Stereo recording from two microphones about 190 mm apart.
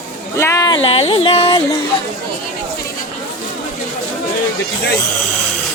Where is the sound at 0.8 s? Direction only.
30° left (ahead or behind).